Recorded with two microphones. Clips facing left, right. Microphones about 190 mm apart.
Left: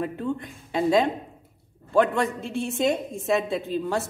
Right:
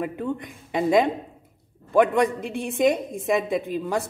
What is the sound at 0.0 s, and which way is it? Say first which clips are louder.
A woman's voice: even; 15° right (ahead or behind).